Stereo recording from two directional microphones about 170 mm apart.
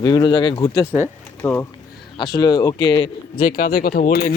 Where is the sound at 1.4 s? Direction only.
10° left (ahead or behind).